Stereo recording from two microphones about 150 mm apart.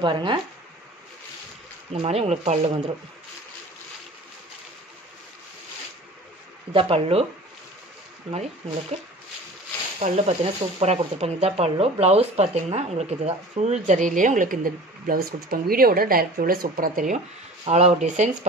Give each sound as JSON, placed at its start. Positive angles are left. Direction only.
{"t": 0.0, "sound": "speech", "side_deg": -35}
{"t": 1.9, "sound": "speech", "side_deg": -40}
{"t": 6.7, "sound": "speech", "side_deg": -40}
{"t": 9.9, "sound": "speech", "side_deg": -45}
{"t": 17.6, "sound": "speech", "side_deg": -45}